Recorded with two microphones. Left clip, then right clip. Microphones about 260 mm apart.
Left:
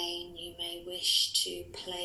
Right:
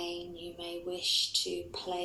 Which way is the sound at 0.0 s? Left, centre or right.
Centre.